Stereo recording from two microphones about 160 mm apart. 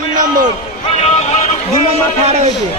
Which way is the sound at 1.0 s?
45° left (ahead or behind).